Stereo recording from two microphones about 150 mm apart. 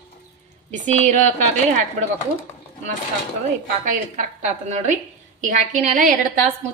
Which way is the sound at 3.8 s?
55° right (ahead or behind).